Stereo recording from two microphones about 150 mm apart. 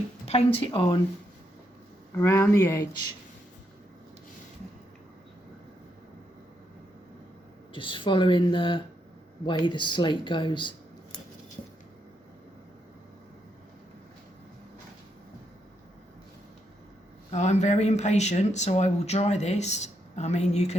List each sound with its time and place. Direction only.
0.3 s speech: 40° left (ahead or behind)
2.1 s speech: 15° left (ahead or behind)
7.7 s speech: 35° left (ahead or behind)
17.3 s speech: 50° left (ahead or behind)